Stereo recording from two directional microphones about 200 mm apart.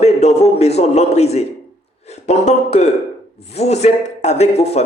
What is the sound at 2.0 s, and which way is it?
Speech, 35° left (ahead or behind).